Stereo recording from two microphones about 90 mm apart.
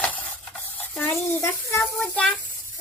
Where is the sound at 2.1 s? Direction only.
15° left (ahead or behind).